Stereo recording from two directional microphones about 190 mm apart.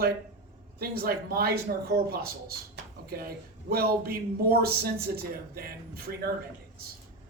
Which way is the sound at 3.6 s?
55° right (ahead or behind).